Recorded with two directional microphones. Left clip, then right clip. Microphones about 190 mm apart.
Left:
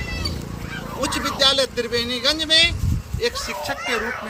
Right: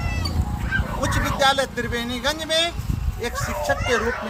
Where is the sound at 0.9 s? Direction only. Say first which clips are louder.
Left 3 dB; 55° right (ahead or behind).